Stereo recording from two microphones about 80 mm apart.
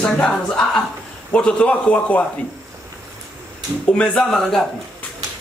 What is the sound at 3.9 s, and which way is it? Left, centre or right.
Speech, centre.